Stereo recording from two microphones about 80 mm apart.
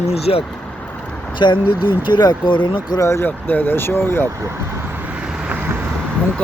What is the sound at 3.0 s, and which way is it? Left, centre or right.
Speech, left.